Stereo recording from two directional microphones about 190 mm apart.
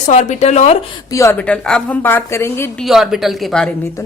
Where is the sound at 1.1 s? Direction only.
15° left (ahead or behind).